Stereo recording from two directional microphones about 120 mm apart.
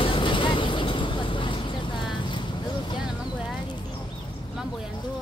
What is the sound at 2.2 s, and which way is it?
Boat, 40° left (ahead or behind).